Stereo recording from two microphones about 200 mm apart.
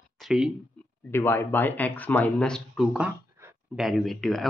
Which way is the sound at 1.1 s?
10° left (ahead or behind).